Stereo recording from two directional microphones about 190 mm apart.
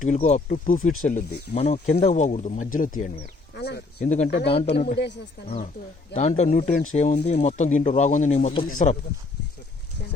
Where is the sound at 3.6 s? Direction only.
55° left (ahead or behind).